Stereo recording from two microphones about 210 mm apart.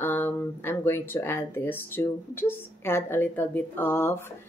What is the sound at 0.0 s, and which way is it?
Speech, 10° left (ahead or behind).